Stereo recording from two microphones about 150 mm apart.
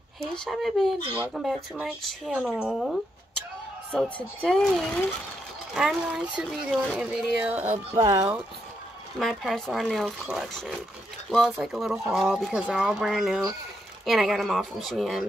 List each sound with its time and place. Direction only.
0.2 s speech: centre (ahead or behind); by 8.4 s 20° right (ahead or behind)
9.2 s speech: centre (ahead or behind)